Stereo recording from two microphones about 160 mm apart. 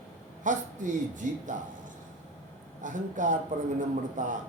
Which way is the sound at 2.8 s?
55° right (ahead or behind).